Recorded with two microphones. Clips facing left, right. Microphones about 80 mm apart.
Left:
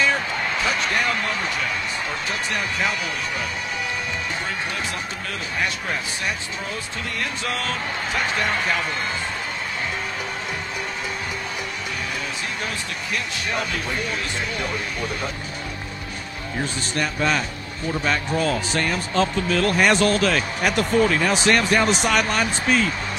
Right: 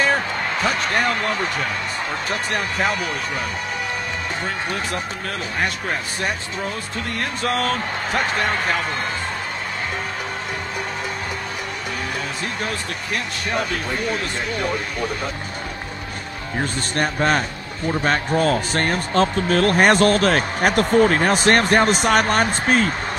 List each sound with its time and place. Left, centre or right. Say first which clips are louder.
0.0 s speech: right 2 dB; right
5.6 s speech: right 2 dB; right
13.1 s speech: right 2 dB; right
16.5 s speech: right 3 dB; right